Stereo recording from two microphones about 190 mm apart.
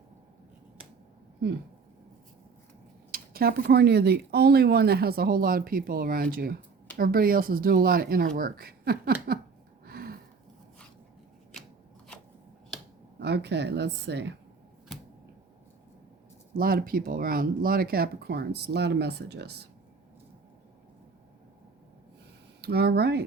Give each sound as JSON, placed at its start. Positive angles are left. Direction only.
{"t": 3.1, "sound": "speech", "side_deg": -50}
{"t": 9.8, "sound": "a sound", "side_deg": -55}
{"t": 13.1, "sound": "speech", "side_deg": -60}
{"t": 16.6, "sound": "speech", "side_deg": -50}
{"t": 22.6, "sound": "speech", "side_deg": -55}